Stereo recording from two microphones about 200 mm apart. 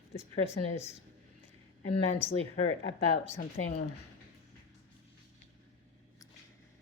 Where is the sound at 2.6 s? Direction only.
65° left (ahead or behind).